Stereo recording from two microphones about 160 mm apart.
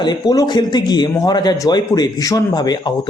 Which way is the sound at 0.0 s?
25° left (ahead or behind).